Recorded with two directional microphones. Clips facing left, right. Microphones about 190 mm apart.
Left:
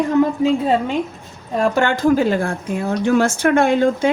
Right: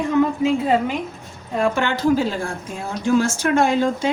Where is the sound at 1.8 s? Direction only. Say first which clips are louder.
Left 5 dB; 50° left (ahead or behind).